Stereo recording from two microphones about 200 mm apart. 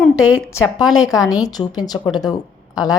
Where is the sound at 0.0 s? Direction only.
5° right (ahead or behind).